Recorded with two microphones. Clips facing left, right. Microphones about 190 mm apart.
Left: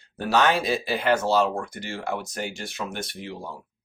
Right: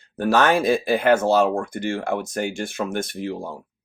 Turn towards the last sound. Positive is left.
turn(degrees=-45)  # may be behind; listen again after turning